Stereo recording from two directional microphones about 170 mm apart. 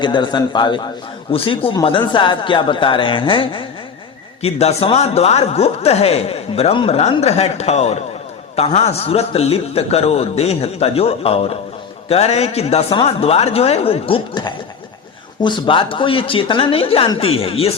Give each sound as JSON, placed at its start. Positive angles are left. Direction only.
{"t": 0.0, "sound": "speech", "side_deg": 25}